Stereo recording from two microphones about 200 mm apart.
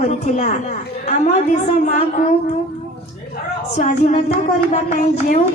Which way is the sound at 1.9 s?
40° left (ahead or behind).